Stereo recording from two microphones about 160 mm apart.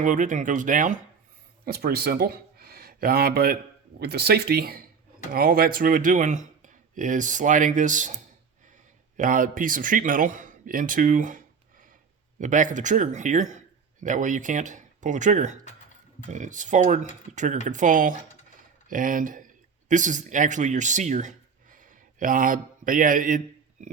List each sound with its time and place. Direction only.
0.0 s speech: 55° right (ahead or behind)
1.6 s speech: 75° right (ahead or behind)
4.0 s a man's voice: 90° right; by 23.4 s 55° right (ahead or behind)